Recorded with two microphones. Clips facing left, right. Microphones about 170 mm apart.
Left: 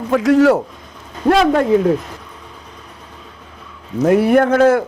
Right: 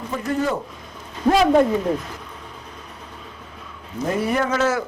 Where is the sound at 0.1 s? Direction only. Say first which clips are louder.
Left 12 dB; 90° left.